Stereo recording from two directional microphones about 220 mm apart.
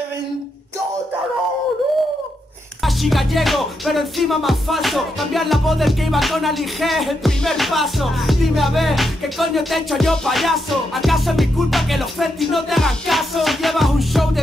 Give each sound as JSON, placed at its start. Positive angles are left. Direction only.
{"t": 2.8, "sound": "music", "side_deg": 0}